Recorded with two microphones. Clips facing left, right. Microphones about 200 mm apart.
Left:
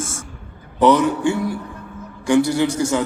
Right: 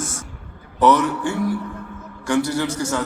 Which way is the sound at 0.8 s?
15° left (ahead or behind).